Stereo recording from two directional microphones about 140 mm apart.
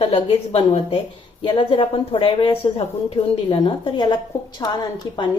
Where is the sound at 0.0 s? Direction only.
40° left (ahead or behind).